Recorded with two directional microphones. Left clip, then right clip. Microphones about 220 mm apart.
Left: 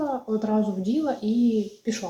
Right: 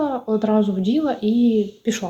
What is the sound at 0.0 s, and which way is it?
Speech, 25° right (ahead or behind).